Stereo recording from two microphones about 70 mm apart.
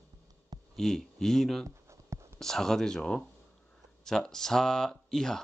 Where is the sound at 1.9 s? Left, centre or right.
Right.